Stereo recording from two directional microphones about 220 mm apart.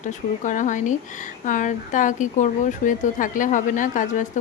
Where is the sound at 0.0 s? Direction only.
35° left (ahead or behind).